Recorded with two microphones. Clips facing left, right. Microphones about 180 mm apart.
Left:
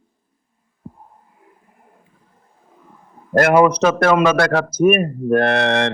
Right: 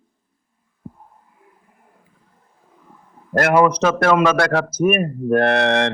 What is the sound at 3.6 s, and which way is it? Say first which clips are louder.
Speech: left 2 dB; 15° left (ahead or behind).